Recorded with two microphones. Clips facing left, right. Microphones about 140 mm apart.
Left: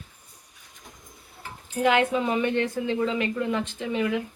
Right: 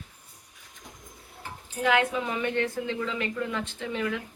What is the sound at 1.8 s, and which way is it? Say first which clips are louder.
A woman's voice: left 3 dB; 25° left (ahead or behind).